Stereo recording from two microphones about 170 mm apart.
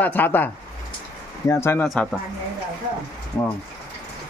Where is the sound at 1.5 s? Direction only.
15° left (ahead or behind).